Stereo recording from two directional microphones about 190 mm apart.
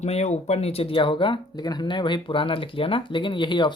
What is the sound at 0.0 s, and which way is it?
Speech, 35° left (ahead or behind).